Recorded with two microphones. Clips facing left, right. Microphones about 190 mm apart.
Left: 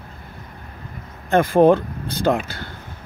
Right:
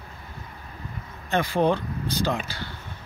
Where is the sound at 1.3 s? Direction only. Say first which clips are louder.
Left 9 dB; 50° left (ahead or behind).